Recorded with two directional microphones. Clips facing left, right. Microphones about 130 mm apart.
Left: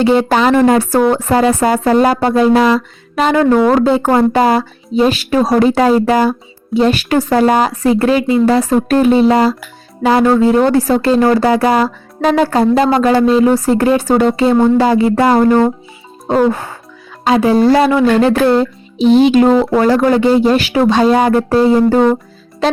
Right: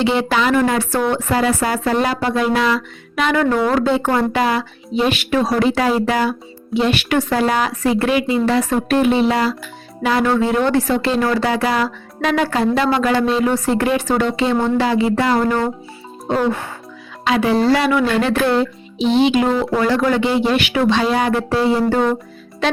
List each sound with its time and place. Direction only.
0.0 s speech: 45° left (ahead or behind)
2.2 s speech: 30° left (ahead or behind)